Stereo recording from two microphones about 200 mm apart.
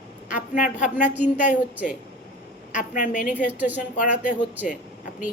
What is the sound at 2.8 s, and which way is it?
Speech, 40° left (ahead or behind).